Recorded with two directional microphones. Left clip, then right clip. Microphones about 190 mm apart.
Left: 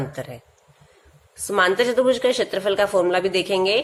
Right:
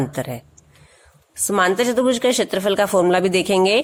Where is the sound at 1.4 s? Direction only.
40° right (ahead or behind).